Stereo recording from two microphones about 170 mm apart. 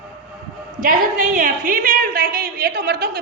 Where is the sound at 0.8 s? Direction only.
50° right (ahead or behind).